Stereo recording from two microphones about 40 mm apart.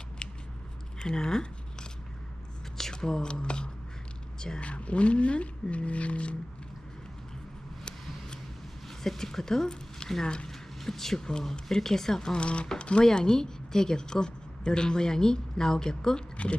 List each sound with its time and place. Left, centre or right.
0.9 s scissors: centre
2.9 s speech: centre
4.6 s speech: left
8.9 s speech: centre
10.5 s a woman's voice: centre
12.3 s speech: left
13.1 s a woman's voice: centre